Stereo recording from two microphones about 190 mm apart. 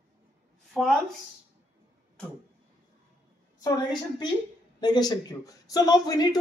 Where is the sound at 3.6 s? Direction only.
25° left (ahead or behind).